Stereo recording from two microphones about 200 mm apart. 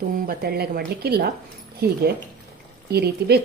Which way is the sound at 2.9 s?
55° right (ahead or behind).